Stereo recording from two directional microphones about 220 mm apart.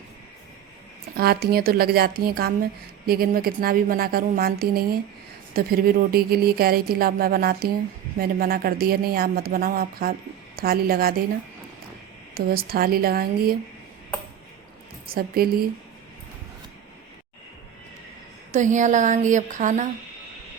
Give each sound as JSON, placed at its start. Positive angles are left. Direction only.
{"t": 1.1, "sound": "a woman's voice", "side_deg": -45}
{"t": 12.3, "sound": "a woman's voice", "side_deg": -45}
{"t": 15.1, "sound": "a woman's voice", "side_deg": -45}
{"t": 18.5, "sound": "a woman's voice", "side_deg": -35}